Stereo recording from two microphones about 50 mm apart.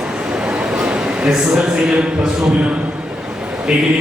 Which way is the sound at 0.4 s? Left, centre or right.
Centre.